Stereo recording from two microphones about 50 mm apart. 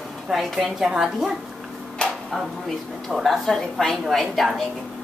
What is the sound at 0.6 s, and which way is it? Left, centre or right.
Speech, centre.